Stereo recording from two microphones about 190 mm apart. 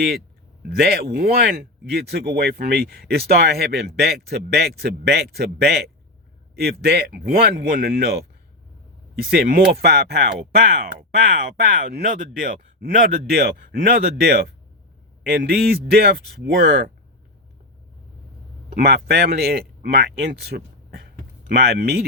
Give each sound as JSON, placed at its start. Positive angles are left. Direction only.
{"t": 0.7, "sound": "speech", "side_deg": -55}
{"t": 18.7, "sound": "speech", "side_deg": -55}